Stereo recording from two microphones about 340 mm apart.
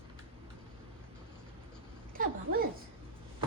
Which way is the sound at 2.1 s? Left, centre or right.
Right.